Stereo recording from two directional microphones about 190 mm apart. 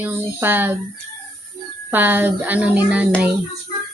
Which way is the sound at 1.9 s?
10° right (ahead or behind).